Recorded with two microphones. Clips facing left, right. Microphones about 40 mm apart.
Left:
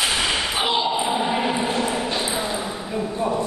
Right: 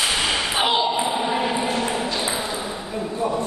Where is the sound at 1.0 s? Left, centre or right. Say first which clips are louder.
Even; centre.